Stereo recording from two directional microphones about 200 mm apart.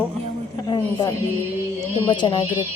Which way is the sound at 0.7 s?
20° left (ahead or behind).